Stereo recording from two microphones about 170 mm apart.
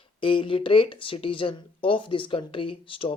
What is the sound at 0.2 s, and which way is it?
Speech, 30° left (ahead or behind).